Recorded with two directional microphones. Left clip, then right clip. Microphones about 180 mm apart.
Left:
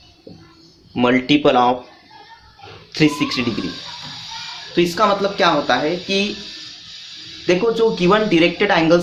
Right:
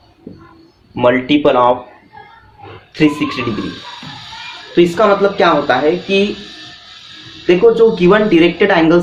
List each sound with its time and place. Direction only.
0.9 s speech: 50° left (ahead or behind)
3.0 s speech: 40° left (ahead or behind)
4.7 s speech: 35° left (ahead or behind)
7.4 s speech: 35° left (ahead or behind)